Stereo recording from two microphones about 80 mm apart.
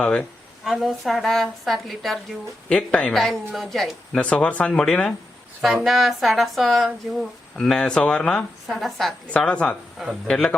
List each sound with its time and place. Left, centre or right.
0.0 s speech: centre
0.6 s speech: centre
2.6 s speech: centre
4.1 s speech: centre
5.6 s speech: centre
7.5 s speech: centre